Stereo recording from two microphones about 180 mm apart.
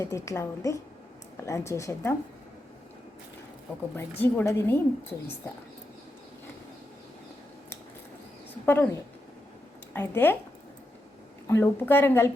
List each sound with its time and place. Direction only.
0.0 s speech: 15° left (ahead or behind)
4.2 s speech: 15° left (ahead or behind)
8.6 s speech: 10° left (ahead or behind)
11.4 s speech: 10° left (ahead or behind)